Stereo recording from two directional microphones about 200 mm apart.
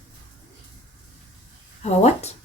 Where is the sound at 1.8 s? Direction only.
35° left (ahead or behind).